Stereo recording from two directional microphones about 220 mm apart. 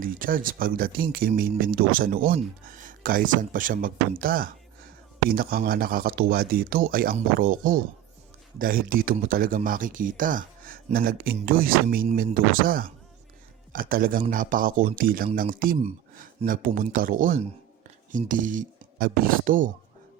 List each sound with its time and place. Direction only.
0.0 s speech: 40° right (ahead or behind)